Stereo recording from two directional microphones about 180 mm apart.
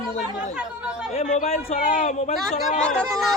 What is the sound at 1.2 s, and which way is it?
Speech, 35° left (ahead or behind).